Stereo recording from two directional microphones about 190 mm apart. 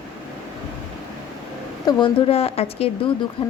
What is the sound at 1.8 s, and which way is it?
Speech, 25° left (ahead or behind).